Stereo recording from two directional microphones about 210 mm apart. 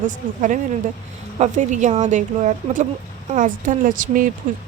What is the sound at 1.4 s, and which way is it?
Speech, 35° right (ahead or behind).